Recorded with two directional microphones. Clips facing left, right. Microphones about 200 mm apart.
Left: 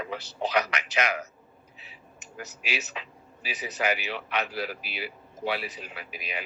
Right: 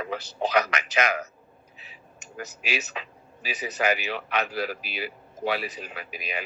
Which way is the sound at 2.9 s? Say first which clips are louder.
Right 2 dB; 45° right (ahead or behind).